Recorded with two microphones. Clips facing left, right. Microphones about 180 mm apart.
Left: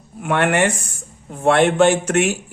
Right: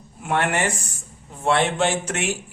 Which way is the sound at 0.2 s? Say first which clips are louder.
Left 5 dB; 65° left (ahead or behind).